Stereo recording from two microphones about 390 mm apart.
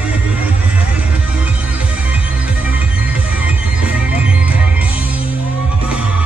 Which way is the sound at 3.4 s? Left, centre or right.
Centre.